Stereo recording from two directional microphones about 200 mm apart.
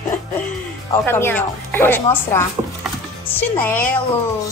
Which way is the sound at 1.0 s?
10° left (ahead or behind).